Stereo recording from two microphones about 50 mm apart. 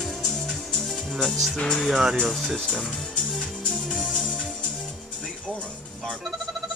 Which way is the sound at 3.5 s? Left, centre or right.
Centre.